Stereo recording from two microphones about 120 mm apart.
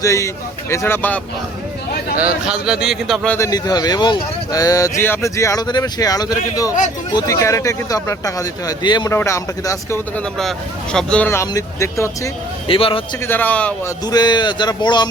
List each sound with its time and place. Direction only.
0.0 s speech: 25° left (ahead or behind)
2.1 s speech: 10° right (ahead or behind)
3.3 s speech: 30° left (ahead or behind)
9.0 s speech: 25° left (ahead or behind)
10.9 s speech: 10° left (ahead or behind)
11.3 s speech: 25° left (ahead or behind)
12.6 s a man's voice: 45° left (ahead or behind)
13.2 s speech: 15° left (ahead or behind)
13.8 s speech: 35° left (ahead or behind)